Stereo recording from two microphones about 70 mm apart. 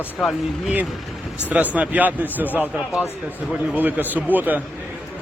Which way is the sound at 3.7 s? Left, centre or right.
Right.